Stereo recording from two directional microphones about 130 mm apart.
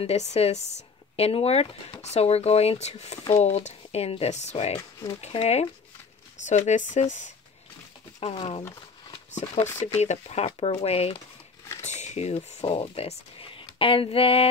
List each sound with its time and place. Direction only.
0.0 s speech: 55° left (ahead or behind)
6.4 s speech: 65° left (ahead or behind)
8.2 s speech: 50° left (ahead or behind)
9.9 s speech: 55° left (ahead or behind)
11.8 s speech: 60° left (ahead or behind)